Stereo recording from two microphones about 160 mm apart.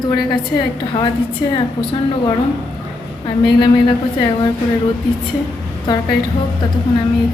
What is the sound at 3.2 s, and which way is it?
A woman's voice, 30° left (ahead or behind).